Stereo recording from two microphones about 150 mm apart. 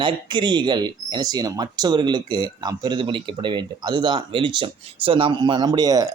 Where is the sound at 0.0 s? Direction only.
30° right (ahead or behind).